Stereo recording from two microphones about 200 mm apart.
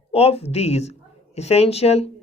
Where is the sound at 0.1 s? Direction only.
30° left (ahead or behind).